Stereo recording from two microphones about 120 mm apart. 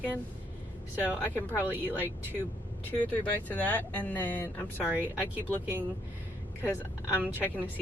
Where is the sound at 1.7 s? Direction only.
15° right (ahead or behind).